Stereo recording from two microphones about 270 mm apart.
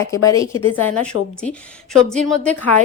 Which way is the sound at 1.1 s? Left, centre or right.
Left.